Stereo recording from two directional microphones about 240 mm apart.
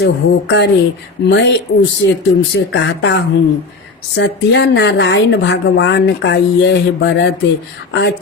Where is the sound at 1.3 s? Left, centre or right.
Left.